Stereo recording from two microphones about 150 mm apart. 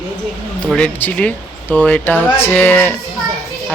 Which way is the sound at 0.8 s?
10° left (ahead or behind).